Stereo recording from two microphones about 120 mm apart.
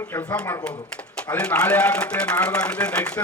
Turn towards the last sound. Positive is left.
turn(degrees=10)  # may be behind; listen again after turning